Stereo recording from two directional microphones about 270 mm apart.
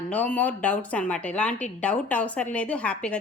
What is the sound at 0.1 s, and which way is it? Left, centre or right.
Speech, centre.